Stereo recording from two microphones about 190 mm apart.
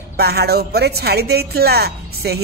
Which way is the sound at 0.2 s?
55° right (ahead or behind).